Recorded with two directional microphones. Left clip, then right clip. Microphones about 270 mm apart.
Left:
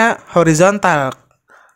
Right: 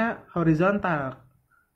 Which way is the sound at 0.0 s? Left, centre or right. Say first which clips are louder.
Left 14 dB; left.